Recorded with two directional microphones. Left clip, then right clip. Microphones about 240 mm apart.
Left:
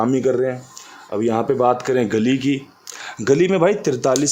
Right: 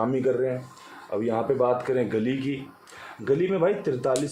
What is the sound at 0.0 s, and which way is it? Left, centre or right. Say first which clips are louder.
Speech: left 6 dB; left.